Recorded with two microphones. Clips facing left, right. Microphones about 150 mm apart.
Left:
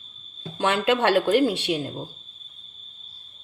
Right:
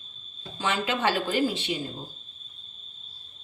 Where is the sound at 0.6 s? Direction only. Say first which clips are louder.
Left 6 dB; 65° left (ahead or behind).